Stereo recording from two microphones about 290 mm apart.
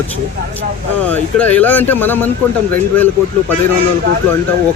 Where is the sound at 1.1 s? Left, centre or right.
Centre.